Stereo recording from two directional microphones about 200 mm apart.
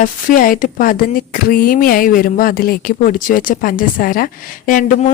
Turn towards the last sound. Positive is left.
turn(degrees=45)  # may be behind; listen again after turning